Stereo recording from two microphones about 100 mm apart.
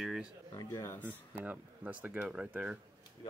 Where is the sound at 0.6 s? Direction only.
35° left (ahead or behind).